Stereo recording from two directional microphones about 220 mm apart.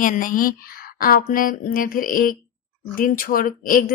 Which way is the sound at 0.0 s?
40° left (ahead or behind).